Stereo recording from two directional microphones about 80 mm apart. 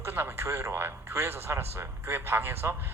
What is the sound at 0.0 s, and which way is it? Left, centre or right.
A man's voice, right.